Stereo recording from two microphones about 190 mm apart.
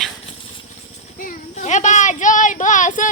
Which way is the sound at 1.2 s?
40° left (ahead or behind).